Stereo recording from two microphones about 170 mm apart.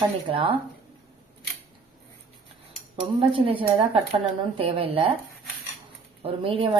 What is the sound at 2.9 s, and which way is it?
A woman's voice, 30° right (ahead or behind).